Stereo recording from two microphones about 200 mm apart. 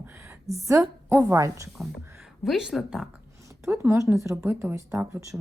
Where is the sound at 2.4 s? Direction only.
Centre (ahead or behind).